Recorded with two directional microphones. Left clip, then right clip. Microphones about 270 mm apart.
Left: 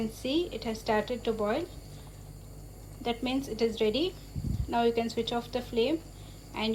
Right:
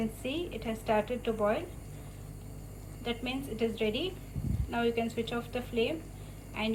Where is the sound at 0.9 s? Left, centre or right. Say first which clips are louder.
Left 1 dB; left.